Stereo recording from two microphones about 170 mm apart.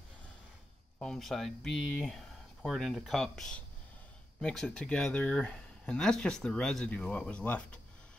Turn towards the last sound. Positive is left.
turn(degrees=5)  # may be behind; listen again after turning